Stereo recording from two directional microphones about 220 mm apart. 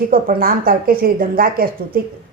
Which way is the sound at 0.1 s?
40° right (ahead or behind).